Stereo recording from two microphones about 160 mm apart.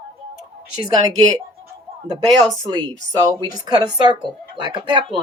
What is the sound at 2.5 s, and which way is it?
Speech, 25° right (ahead or behind).